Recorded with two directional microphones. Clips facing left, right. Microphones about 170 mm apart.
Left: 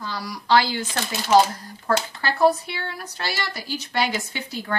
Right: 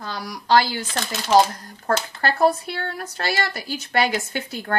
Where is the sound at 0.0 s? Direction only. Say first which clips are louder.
Even; 50° right (ahead or behind).